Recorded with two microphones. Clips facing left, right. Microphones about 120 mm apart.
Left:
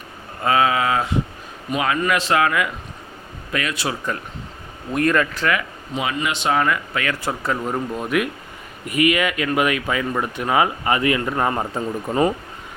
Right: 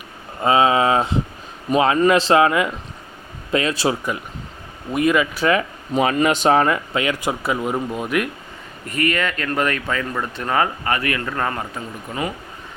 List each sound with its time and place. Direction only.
0.4 s speech: 25° right (ahead or behind)
4.9 s a man's voice: 5° right (ahead or behind)
5.9 s speech: 45° right (ahead or behind); by 8.3 s centre (ahead or behind)
8.9 s speech: 10° left (ahead or behind)
11.7 s speech: 35° left (ahead or behind)